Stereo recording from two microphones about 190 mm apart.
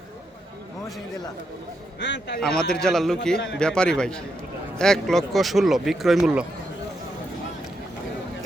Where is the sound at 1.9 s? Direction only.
70° left (ahead or behind).